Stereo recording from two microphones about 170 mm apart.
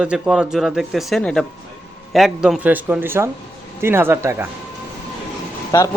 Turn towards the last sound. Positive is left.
turn(degrees=20)  # may be behind; listen again after turning